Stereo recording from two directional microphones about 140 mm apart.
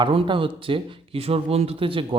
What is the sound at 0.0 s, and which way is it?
Speech, 40° right (ahead or behind).